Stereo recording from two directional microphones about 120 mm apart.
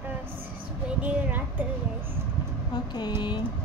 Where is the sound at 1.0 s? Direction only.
10° right (ahead or behind).